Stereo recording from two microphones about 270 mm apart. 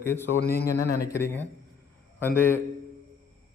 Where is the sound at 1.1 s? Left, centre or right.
Centre.